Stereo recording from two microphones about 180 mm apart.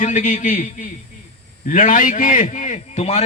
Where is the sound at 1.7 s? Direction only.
45° left (ahead or behind).